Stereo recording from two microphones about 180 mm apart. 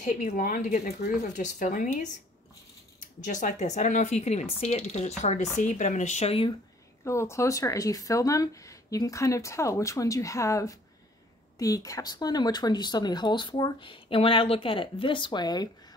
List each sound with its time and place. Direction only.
0.0 s speech: 50° left (ahead or behind)
3.3 s speech: 45° left (ahead or behind)
7.1 s speech: 15° left (ahead or behind)